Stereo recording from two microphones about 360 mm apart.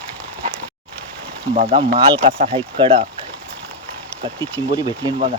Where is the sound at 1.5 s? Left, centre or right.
Centre.